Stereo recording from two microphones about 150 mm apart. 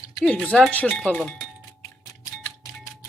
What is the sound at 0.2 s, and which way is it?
Speech, 10° left (ahead or behind).